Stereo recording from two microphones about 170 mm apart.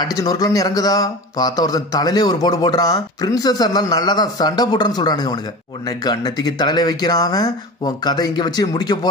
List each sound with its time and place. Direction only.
0.0 s speech: 20° left (ahead or behind)